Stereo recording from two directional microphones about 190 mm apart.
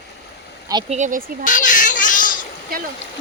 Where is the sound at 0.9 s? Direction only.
40° right (ahead or behind).